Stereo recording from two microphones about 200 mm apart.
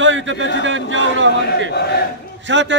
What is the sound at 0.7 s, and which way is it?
A man's voice, 70° right (ahead or behind).